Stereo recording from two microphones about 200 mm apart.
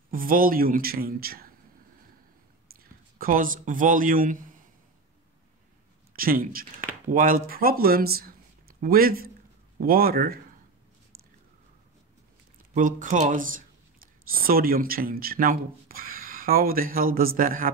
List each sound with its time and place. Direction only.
0.1 s speech: 45° right (ahead or behind)
2.8 s a man's voice: 45° right (ahead or behind)
6.1 s speech: 45° right (ahead or behind)
12.7 s speech: 40° right (ahead or behind)